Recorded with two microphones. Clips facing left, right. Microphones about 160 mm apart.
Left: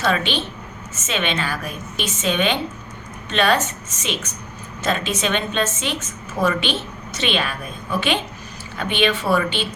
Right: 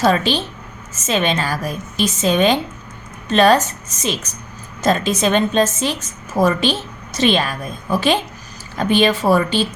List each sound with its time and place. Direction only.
0.0 s a woman's voice: 40° right (ahead or behind)